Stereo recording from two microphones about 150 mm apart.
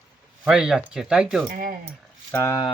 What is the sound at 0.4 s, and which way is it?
Speech, 5° right (ahead or behind).